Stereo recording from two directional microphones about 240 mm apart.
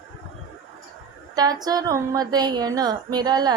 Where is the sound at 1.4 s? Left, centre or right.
Centre.